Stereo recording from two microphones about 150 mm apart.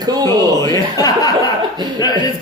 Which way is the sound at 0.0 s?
25° right (ahead or behind).